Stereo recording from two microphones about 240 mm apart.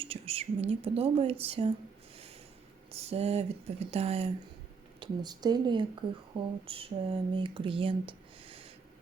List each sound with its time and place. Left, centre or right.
0.0 s speech: right
3.1 s speech: right